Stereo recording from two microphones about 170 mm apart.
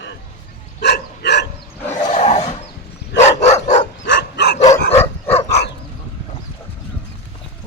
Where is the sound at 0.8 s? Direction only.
80° left.